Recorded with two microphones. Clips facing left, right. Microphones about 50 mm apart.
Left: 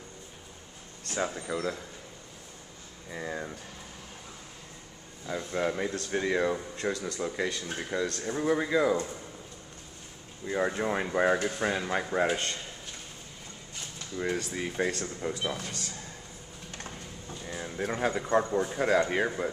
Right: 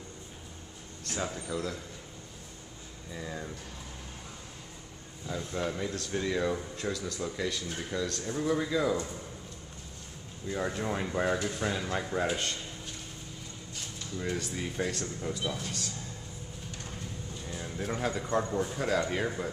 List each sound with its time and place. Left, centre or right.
1.1 s speech: left
3.1 s speech: left
5.3 s speech: left
10.4 s speech: left
14.1 s speech: left
15.3 s a man's voice: left
17.7 s speech: left